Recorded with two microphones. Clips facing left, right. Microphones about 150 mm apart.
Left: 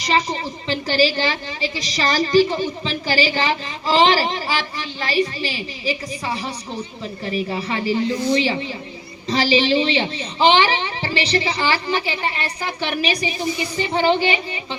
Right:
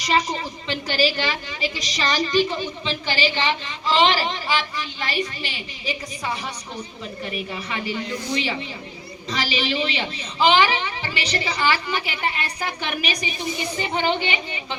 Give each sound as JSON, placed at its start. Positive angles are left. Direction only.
{"t": 0.0, "sound": "a woman's voice", "side_deg": 30}